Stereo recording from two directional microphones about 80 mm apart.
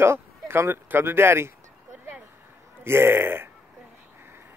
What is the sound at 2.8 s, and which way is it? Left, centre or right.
Speech, right.